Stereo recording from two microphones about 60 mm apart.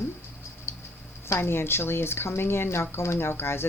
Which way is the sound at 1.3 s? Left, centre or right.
Left.